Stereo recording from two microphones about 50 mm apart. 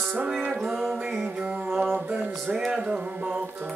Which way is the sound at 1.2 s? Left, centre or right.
Right.